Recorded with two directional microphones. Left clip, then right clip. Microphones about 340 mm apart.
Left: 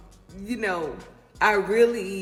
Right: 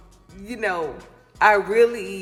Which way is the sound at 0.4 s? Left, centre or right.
Centre.